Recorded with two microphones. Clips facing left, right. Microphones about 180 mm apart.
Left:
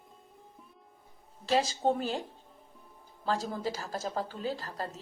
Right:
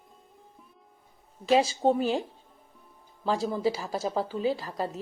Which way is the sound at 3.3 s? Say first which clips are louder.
Right 5 dB; 10° right (ahead or behind).